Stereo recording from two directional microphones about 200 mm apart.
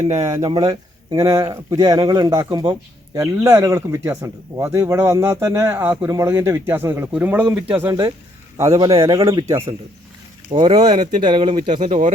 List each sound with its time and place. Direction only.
0.4 s speech: 20° right (ahead or behind)
10.8 s speech: 35° right (ahead or behind)
11.2 s speech: 20° right (ahead or behind)
11.8 s speech: 35° right (ahead or behind)